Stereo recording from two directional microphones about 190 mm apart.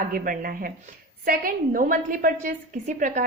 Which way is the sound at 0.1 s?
50° right (ahead or behind).